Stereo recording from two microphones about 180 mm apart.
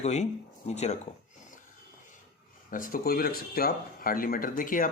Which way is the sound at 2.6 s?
50° left (ahead or behind).